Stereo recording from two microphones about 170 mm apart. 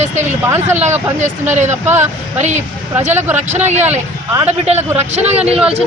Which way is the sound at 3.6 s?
40° right (ahead or behind).